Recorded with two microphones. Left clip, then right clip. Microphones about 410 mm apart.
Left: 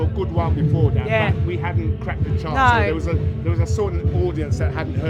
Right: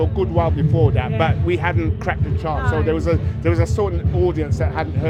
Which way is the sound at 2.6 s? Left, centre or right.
Left.